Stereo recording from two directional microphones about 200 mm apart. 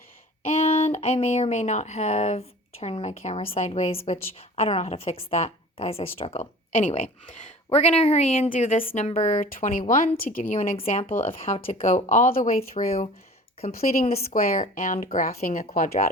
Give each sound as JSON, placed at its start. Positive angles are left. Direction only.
{"t": 0.4, "sound": "speech", "side_deg": 30}
{"t": 12.7, "sound": "speech", "side_deg": 30}
{"t": 13.7, "sound": "speech", "side_deg": 45}